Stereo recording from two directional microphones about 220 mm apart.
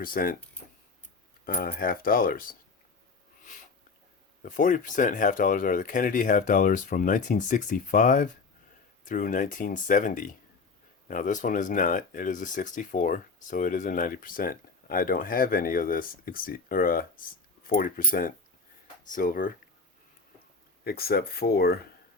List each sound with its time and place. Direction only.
0.0 s speech: 40° left (ahead or behind)
1.5 s speech: 40° left (ahead or behind)
4.4 s speech: 35° left (ahead or behind)
20.8 s speech: 45° left (ahead or behind)